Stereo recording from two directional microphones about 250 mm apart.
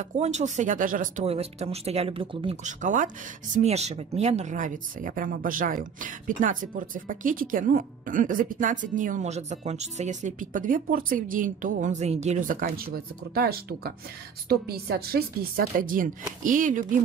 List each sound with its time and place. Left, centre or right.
0.0 s speech: right